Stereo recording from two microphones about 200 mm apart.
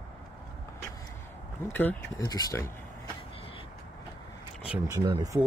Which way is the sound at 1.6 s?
10° left (ahead or behind).